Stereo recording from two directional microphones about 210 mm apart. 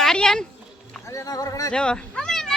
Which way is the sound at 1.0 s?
15° left (ahead or behind).